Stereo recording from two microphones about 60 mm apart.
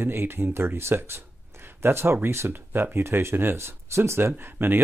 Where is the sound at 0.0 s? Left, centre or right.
Right.